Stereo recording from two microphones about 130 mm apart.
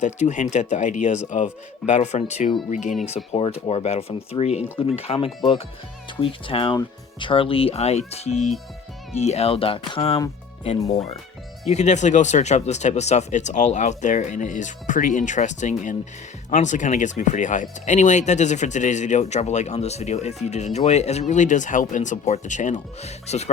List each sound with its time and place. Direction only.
0.0 s speech: 65° left (ahead or behind)
3.3 s speech: 50° left (ahead or behind)
11.6 s speech: 60° left (ahead or behind)